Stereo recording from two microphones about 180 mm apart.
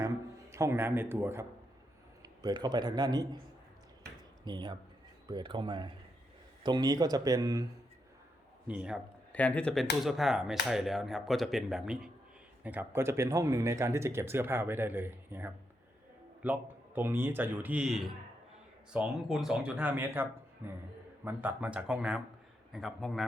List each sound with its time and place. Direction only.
0.5 s a man's voice: 15° right (ahead or behind)
4.4 s speech: 25° right (ahead or behind)
8.6 s speech: 5° right (ahead or behind)
9.3 s speech: 10° left (ahead or behind)